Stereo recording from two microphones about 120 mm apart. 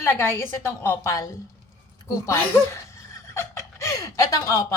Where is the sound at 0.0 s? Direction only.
20° left (ahead or behind).